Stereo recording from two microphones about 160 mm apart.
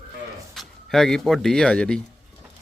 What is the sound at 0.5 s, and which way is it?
Speech, 5° left (ahead or behind).